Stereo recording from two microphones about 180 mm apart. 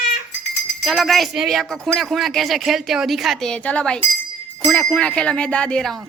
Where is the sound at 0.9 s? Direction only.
Centre (ahead or behind).